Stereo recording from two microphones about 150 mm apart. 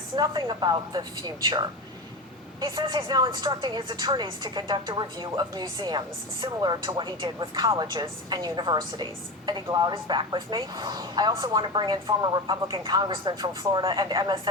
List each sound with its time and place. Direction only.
0.2 s a woman's voice: 30° right (ahead or behind)